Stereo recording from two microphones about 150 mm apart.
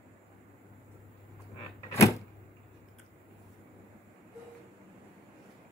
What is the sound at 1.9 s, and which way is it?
Power windows, 20° left (ahead or behind).